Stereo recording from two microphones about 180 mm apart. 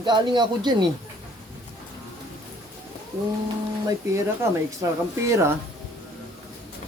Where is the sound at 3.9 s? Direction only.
15° right (ahead or behind).